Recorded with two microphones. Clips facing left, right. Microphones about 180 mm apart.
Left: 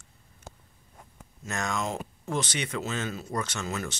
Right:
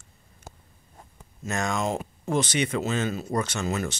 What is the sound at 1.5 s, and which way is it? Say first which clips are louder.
Speech: right 4 dB; 25° right (ahead or behind).